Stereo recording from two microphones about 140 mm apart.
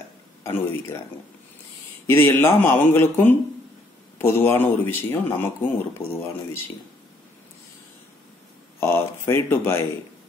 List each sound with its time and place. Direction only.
0.4 s a man's voice: 20° left (ahead or behind)
2.0 s speech: 15° left (ahead or behind)
8.7 s speech: 15° left (ahead or behind)